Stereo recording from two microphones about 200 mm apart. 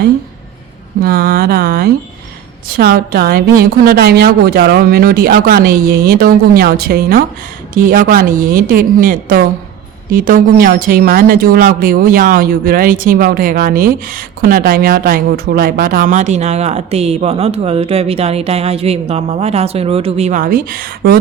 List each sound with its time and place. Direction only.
1.0 s speech: 45° right (ahead or behind)